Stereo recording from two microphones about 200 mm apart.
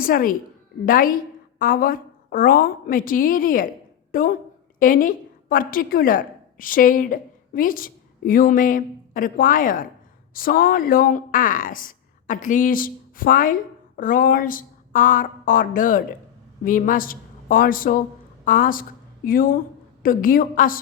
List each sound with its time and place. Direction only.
0.0 s a woman's voice: 45° left (ahead or behind)